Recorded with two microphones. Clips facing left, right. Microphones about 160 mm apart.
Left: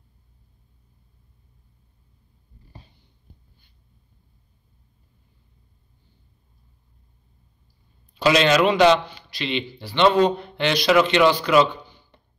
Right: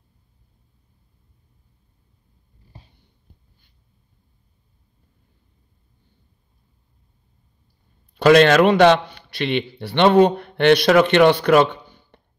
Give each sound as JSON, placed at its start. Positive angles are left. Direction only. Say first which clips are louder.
{"t": 8.1, "sound": "a man's voice", "louder": "right 6 dB", "side_deg": -55}